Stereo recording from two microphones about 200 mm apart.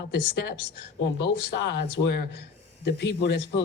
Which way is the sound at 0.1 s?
55° left (ahead or behind).